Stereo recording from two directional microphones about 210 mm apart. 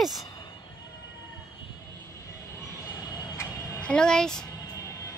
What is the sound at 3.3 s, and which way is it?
Music, 5° left (ahead or behind).